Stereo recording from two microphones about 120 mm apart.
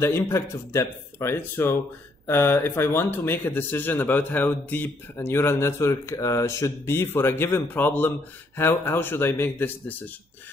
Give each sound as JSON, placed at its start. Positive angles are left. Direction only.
{"t": 0.0, "sound": "speech", "side_deg": 20}